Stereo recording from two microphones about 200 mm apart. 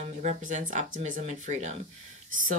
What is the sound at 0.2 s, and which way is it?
Speech, 35° right (ahead or behind).